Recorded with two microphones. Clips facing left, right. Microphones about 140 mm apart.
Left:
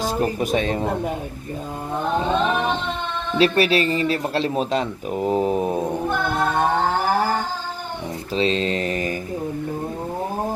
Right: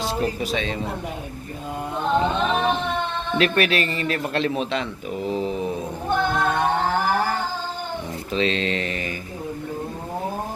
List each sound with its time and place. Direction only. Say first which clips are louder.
0.0 s speech: left 3 dB; 50° left (ahead or behind)
3.4 s a man's voice: left 4 dB; 35° left (ahead or behind)
8.3 s a man's voice: left 2 dB; 35° left (ahead or behind)